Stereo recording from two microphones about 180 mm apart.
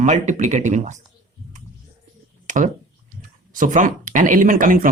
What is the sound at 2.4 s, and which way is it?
Speech, 45° right (ahead or behind).